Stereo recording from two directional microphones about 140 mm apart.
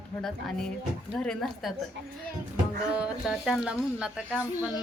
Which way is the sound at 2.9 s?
5° right (ahead or behind).